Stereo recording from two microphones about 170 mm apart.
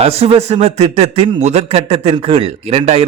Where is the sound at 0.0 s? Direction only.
35° right (ahead or behind).